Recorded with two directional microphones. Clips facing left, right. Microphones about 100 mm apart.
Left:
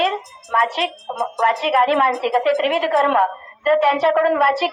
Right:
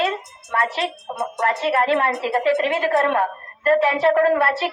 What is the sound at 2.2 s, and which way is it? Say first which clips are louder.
Speech: left 2 dB; 55° left (ahead or behind).